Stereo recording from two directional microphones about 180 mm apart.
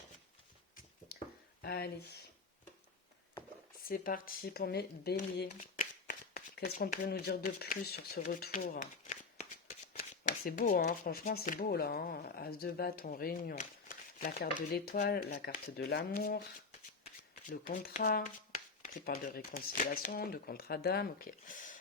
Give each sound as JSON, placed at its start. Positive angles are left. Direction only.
{"t": 1.6, "sound": "speech", "side_deg": 60}
{"t": 3.8, "sound": "speech", "side_deg": 55}
{"t": 5.5, "sound": "speech", "side_deg": 45}
{"t": 17.5, "sound": "speech", "side_deg": 50}